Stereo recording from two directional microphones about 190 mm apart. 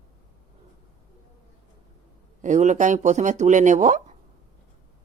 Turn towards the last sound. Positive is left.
turn(degrees=-40)  # may be behind; listen again after turning